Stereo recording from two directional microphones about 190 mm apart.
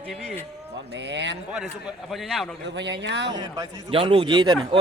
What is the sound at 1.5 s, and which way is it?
Speech, centre (ahead or behind).